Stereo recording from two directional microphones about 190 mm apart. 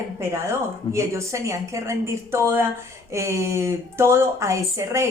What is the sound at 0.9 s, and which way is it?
Speech, 15° right (ahead or behind).